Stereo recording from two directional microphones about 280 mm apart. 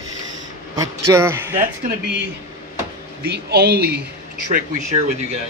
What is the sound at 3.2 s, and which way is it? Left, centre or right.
Speech, right.